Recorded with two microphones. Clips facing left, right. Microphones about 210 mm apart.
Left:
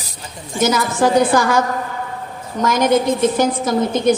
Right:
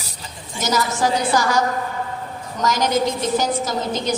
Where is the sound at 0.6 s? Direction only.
55° left (ahead or behind).